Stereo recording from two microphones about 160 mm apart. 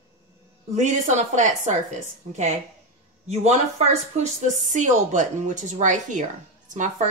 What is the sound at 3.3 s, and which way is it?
A woman's voice, 45° right (ahead or behind).